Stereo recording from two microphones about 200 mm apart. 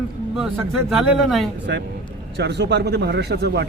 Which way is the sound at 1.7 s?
55° right (ahead or behind).